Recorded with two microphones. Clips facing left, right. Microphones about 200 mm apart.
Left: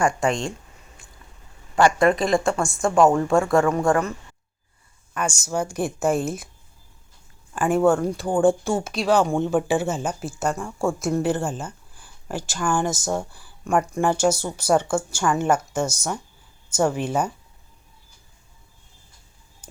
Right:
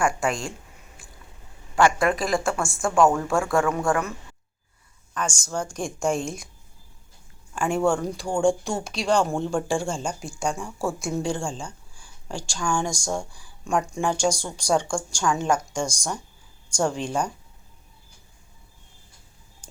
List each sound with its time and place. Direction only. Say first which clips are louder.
0.0 s speech: left 3 dB; centre (ahead or behind)
1.7 s speech: left 3 dB; centre (ahead or behind)
2.9 s a woman's voice: left 2 dB; 15° left (ahead or behind)
3.3 s speech: left 4 dB; centre (ahead or behind)
5.1 s a woman's voice: left 3 dB; 10° left (ahead or behind)
7.5 s speech: left 4 dB; 5° left (ahead or behind)